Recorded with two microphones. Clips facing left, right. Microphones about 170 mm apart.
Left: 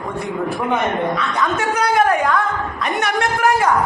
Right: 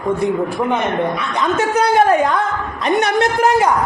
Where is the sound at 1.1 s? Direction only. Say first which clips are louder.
Right 1 dB; 25° right (ahead or behind).